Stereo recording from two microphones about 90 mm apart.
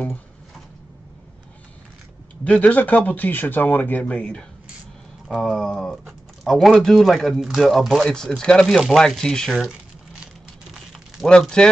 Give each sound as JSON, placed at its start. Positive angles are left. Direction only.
{"t": 2.4, "sound": "speech", "side_deg": 15}
{"t": 5.3, "sound": "speech", "side_deg": 0}
{"t": 11.2, "sound": "speech", "side_deg": 10}